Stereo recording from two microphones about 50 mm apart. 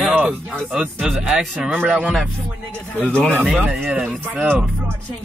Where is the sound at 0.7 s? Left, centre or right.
Centre.